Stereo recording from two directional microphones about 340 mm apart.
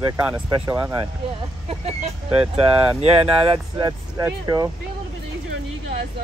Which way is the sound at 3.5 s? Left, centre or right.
Centre.